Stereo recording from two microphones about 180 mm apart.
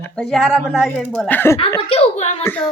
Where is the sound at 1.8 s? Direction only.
30° left (ahead or behind).